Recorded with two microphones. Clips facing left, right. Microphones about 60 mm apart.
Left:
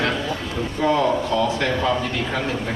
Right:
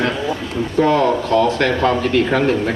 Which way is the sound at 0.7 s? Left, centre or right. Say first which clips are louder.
Right 5 dB; right.